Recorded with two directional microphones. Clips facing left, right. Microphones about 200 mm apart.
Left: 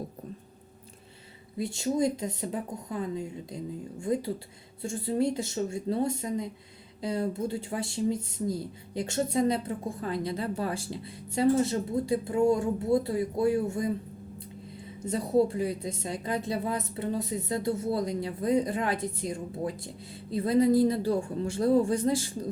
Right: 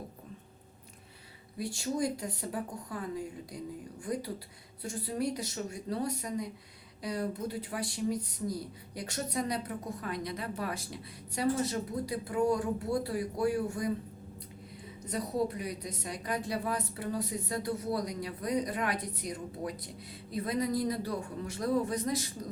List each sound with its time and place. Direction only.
1.5 s speech: 25° left (ahead or behind)
15.0 s speech: 25° left (ahead or behind)